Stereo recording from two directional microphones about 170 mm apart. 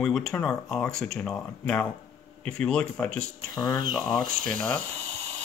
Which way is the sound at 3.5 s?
25° left (ahead or behind).